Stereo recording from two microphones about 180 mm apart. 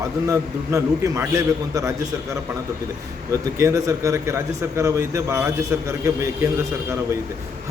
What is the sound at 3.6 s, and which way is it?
A man's voice, 15° right (ahead or behind).